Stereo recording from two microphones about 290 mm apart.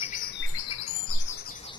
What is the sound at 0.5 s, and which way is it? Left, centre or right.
Chirp, left.